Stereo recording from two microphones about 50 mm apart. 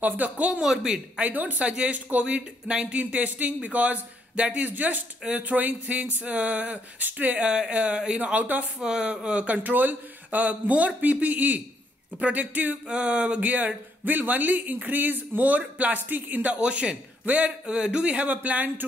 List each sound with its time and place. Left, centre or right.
0.0 s speech: right
0.6 s speech: centre
1.2 s speech: right
7.4 s speech: right
8.8 s speech: centre; by 12.9 s right
12.9 s speech: right